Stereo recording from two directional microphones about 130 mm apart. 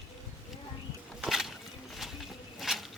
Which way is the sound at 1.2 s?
Centre (ahead or behind).